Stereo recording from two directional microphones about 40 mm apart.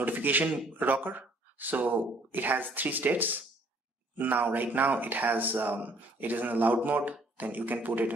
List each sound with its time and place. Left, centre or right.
0.0 s speech: right